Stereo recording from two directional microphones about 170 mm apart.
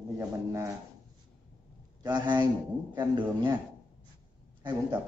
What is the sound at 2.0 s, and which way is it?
Speech, 25° right (ahead or behind).